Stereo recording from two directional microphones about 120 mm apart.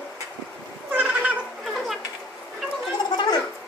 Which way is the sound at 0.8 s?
15° right (ahead or behind).